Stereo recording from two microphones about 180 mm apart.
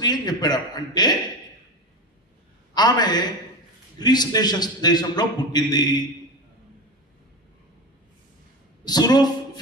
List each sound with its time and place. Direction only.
0.0 s a man's voice: 25° left (ahead or behind)
2.7 s a man's voice: 25° left (ahead or behind)
8.8 s a man's voice: 20° left (ahead or behind)